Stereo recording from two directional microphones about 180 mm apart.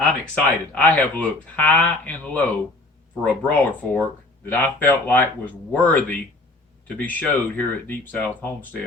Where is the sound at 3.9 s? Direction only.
10° left (ahead or behind).